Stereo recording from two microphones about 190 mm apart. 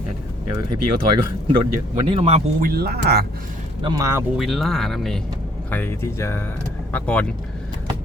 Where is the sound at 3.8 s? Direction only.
20° right (ahead or behind).